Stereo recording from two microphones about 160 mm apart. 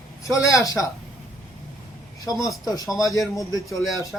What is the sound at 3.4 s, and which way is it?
Speech, 20° left (ahead or behind).